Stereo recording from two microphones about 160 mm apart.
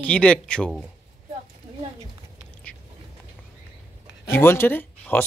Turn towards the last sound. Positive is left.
turn(degrees=10)  # may be behind; listen again after turning